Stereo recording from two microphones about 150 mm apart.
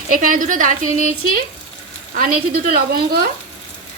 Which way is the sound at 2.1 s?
75° right (ahead or behind).